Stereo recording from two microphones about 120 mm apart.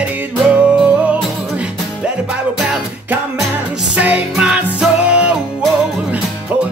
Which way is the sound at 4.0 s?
10° right (ahead or behind).